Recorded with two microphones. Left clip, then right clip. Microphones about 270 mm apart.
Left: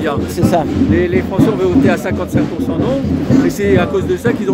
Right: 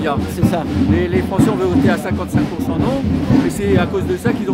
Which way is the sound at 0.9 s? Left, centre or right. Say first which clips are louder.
Left 3 dB; centre.